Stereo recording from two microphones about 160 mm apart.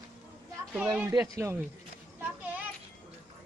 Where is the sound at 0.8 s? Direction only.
15° right (ahead or behind).